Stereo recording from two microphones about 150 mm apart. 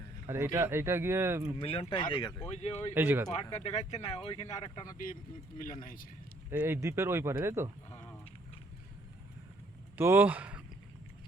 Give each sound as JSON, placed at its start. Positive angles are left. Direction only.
{"t": 0.3, "sound": "speech", "side_deg": -15}
{"t": 1.5, "sound": "speech", "side_deg": 40}
{"t": 2.5, "sound": "speech", "side_deg": 45}
{"t": 2.9, "sound": "speech", "side_deg": -15}
{"t": 3.3, "sound": "speech", "side_deg": 45}
{"t": 5.5, "sound": "a man's voice", "side_deg": 60}
{"t": 6.5, "sound": "speech", "side_deg": -15}
{"t": 7.9, "sound": "a sound", "side_deg": 15}
{"t": 10.0, "sound": "speech", "side_deg": -15}